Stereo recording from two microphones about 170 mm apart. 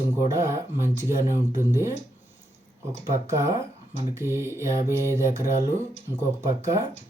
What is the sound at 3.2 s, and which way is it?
Speech, 15° right (ahead or behind).